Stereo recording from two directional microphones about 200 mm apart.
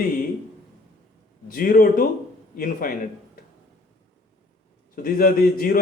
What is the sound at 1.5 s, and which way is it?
A man's voice, 45° left (ahead or behind).